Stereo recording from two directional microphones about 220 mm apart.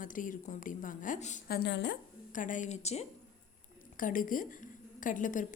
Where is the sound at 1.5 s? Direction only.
50° left (ahead or behind).